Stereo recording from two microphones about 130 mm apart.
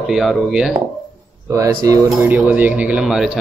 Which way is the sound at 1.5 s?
25° right (ahead or behind).